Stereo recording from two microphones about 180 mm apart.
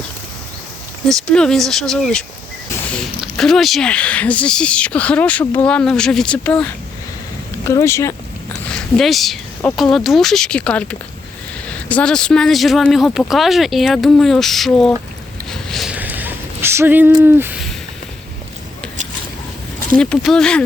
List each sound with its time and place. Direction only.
1.0 s speech: 5° left (ahead or behind)
8.7 s speech: centre (ahead or behind)
15.4 s a sound: centre (ahead or behind)
17.2 s speech: 10° right (ahead or behind)
20.0 s speech: 5° left (ahead or behind)